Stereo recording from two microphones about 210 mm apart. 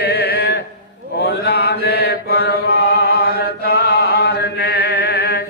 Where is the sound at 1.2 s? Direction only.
50° left (ahead or behind).